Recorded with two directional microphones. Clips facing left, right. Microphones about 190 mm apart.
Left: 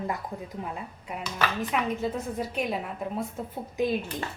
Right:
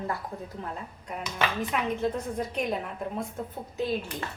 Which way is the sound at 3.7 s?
15° left (ahead or behind).